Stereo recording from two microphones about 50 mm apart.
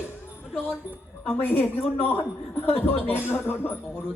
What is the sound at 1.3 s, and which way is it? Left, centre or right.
A woman's voice, left.